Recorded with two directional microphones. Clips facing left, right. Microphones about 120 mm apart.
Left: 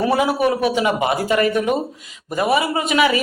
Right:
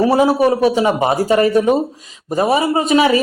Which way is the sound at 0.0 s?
30° right (ahead or behind).